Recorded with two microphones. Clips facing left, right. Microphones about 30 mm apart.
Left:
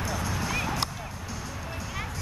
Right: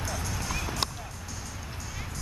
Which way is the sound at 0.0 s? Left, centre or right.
Centre.